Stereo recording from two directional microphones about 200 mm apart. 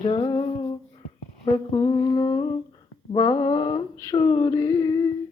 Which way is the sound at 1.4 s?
20° left (ahead or behind).